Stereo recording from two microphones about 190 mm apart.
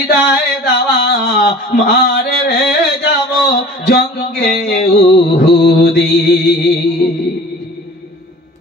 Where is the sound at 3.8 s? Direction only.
60° left (ahead or behind).